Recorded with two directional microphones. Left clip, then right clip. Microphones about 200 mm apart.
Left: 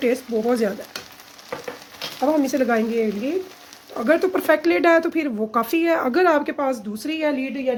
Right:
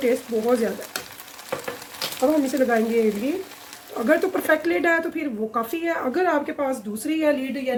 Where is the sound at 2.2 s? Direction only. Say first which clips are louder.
Left 1 dB; 50° left (ahead or behind).